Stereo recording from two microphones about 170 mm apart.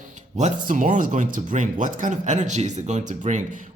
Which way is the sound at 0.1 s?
45° right (ahead or behind).